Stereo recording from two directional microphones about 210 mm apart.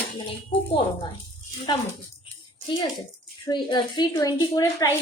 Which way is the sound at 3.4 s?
20° left (ahead or behind).